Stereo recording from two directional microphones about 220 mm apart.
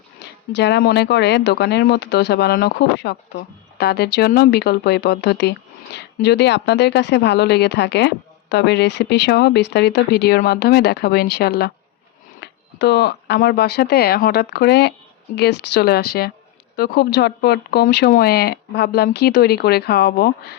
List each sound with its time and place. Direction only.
0.2 s speech: 50° left (ahead or behind)